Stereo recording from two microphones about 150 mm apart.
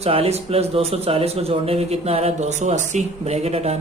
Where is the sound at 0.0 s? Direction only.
40° right (ahead or behind).